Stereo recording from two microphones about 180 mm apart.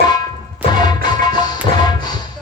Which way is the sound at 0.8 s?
25° left (ahead or behind).